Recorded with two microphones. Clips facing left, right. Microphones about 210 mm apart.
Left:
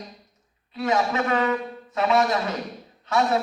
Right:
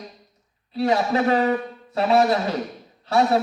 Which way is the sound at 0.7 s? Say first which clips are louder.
Right 3 dB; 35° right (ahead or behind).